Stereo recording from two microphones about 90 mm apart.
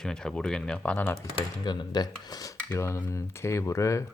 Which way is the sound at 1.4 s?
50° left (ahead or behind).